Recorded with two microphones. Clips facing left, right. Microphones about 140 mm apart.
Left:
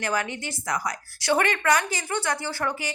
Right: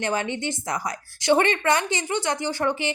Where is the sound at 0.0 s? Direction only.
25° right (ahead or behind).